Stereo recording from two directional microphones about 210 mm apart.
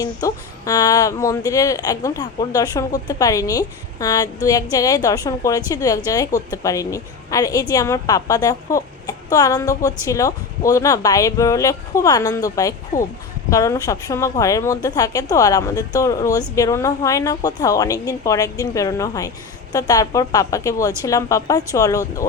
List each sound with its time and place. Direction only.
0.0 s speech: 15° left (ahead or behind)